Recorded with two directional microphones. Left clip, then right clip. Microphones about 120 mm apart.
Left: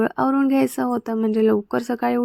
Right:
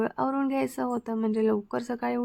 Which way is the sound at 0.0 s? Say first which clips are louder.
Left 8 dB; 30° left (ahead or behind).